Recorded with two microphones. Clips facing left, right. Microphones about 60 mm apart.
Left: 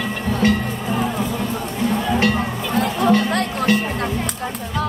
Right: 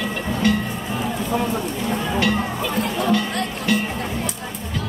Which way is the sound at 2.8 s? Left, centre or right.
Left.